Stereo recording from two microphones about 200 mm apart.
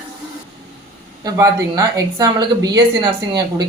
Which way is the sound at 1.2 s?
15° right (ahead or behind).